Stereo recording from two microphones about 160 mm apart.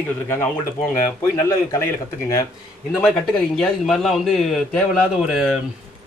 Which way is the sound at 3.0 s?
5° left (ahead or behind).